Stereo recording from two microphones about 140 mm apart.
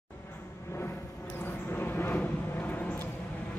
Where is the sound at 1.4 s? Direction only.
15° left (ahead or behind).